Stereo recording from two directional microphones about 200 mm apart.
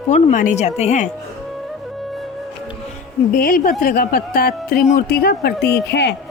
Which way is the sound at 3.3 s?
45° left (ahead or behind).